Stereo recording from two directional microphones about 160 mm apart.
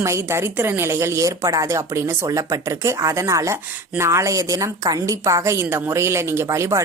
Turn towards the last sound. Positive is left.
turn(degrees=-20)  # may be behind; listen again after turning